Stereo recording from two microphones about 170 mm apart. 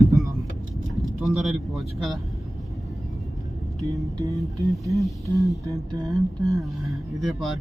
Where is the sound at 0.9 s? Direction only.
Centre (ahead or behind).